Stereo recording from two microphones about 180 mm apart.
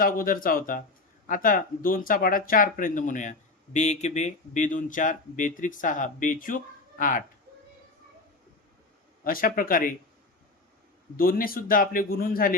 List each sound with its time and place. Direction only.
0.0 s speech: 50° left (ahead or behind)
9.2 s speech: 50° left (ahead or behind)
11.2 s speech: 50° left (ahead or behind)